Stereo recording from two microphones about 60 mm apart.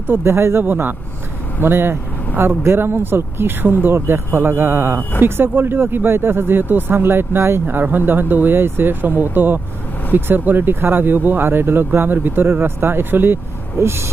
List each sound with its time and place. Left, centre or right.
0.1 s speech: right
0.6 s speech: right
13.7 s speech: right